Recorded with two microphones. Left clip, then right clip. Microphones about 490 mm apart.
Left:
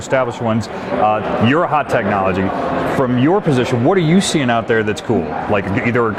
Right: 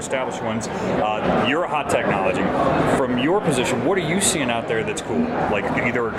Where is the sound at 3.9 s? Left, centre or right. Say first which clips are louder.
Left 5 dB; left.